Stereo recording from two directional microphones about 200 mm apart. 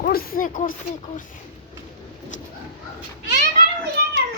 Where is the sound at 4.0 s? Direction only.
55° right (ahead or behind).